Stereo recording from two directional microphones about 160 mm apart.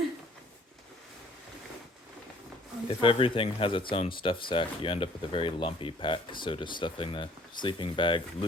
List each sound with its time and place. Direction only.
2.8 s speech: 35° left (ahead or behind)